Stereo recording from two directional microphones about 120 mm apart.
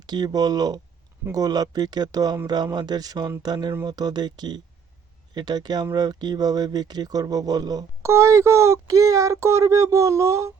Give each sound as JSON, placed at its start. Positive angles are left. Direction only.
{"t": 0.0, "sound": "speech", "side_deg": -35}